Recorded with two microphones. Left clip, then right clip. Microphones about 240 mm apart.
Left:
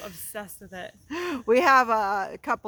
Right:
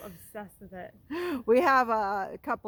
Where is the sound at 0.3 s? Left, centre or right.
Left.